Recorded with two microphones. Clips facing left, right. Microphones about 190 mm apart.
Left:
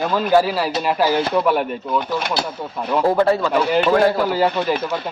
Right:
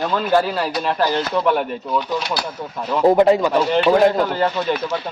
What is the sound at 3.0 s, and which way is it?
Speech, 15° right (ahead or behind).